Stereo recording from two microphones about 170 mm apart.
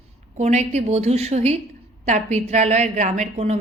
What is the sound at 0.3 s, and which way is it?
A woman's voice, 40° right (ahead or behind).